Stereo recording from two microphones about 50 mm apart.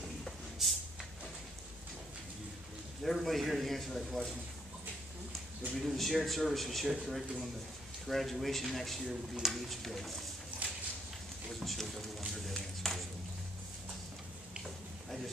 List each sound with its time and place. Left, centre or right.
3.0 s speech: centre
5.8 s speech: centre
10.6 s a sound: right
11.6 s speech: centre